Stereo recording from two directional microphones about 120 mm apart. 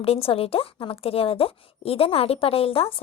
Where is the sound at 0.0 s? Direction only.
55° left (ahead or behind).